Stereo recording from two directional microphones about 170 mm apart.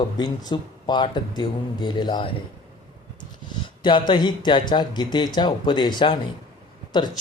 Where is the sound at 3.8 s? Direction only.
25° left (ahead or behind).